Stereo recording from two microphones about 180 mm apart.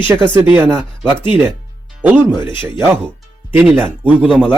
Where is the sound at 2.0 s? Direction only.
10° right (ahead or behind).